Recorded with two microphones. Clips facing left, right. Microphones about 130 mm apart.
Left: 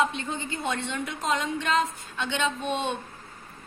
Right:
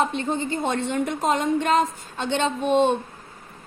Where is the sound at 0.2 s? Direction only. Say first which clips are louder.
Right 7 dB; 40° right (ahead or behind).